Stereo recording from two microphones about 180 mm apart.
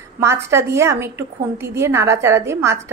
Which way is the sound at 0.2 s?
15° right (ahead or behind).